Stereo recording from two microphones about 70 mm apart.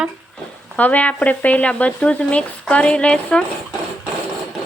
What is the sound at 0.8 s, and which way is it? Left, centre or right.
Speech, left.